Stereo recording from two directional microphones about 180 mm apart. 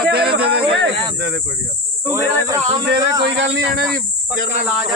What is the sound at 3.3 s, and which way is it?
Speech, 85° right.